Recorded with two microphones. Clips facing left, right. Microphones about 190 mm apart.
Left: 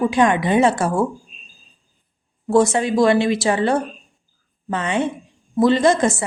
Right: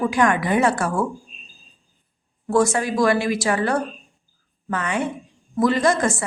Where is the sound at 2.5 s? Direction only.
25° left (ahead or behind).